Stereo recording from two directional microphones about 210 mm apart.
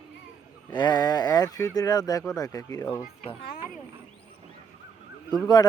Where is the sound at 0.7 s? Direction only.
20° left (ahead or behind).